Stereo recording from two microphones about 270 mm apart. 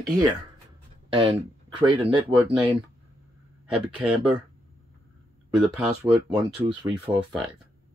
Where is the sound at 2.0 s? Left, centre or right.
Centre.